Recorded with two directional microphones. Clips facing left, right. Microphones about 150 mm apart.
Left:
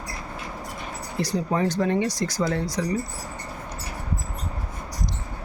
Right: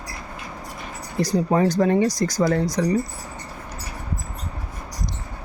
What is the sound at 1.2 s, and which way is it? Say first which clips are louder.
Speech: right 5 dB; 40° right (ahead or behind).